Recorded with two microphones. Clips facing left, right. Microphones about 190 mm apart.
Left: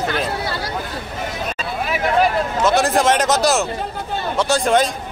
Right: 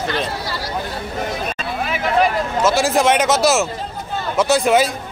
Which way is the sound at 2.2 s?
Centre (ahead or behind).